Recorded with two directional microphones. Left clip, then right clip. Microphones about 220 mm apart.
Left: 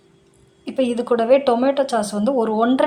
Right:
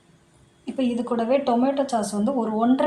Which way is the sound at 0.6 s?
20° left (ahead or behind).